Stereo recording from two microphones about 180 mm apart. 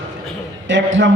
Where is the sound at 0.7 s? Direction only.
90° right.